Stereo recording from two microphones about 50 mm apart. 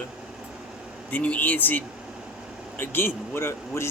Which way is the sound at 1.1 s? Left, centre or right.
Left.